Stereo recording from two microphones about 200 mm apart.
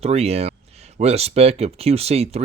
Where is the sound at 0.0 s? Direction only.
30° right (ahead or behind).